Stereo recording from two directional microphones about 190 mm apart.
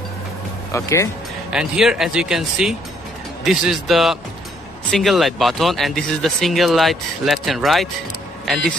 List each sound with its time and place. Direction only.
0.7 s speech: 15° left (ahead or behind)
1.5 s speech: 5° right (ahead or behind)